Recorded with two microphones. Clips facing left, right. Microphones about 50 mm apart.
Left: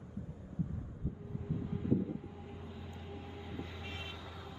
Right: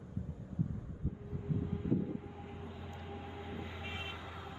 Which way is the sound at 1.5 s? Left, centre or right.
Centre.